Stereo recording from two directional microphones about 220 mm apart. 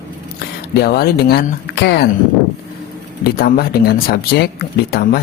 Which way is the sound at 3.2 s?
45° left (ahead or behind).